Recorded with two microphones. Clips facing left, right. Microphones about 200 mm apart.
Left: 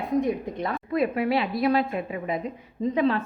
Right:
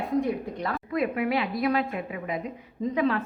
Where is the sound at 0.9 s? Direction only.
30° left (ahead or behind).